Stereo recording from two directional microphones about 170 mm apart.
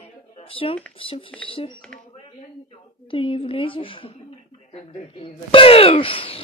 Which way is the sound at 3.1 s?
30° left (ahead or behind).